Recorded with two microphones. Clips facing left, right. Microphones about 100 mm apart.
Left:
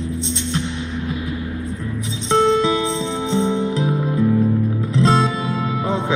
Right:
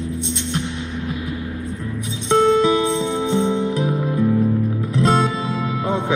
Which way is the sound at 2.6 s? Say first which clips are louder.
Right 2 dB; 50° right (ahead or behind).